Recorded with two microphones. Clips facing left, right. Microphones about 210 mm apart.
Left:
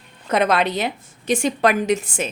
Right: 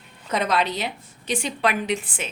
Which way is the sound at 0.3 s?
55° left (ahead or behind).